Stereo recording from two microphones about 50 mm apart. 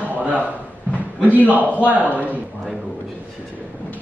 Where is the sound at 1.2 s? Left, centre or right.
Right.